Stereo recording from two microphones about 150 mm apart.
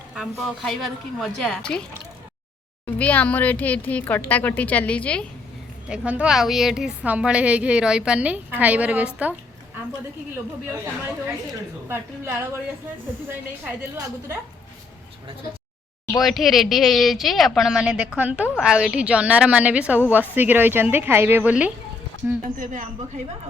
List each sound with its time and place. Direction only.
0.1 s speech: centre (ahead or behind)
2.8 s speech: 10° left (ahead or behind)
5.9 s a woman's voice: 5° right (ahead or behind)
11.9 s a woman's voice: 15° right (ahead or behind)
16.1 s a woman's voice: centre (ahead or behind)
22.5 s speech: 60° right (ahead or behind)